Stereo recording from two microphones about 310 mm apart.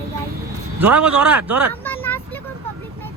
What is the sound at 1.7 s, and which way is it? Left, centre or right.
Vehicle, centre.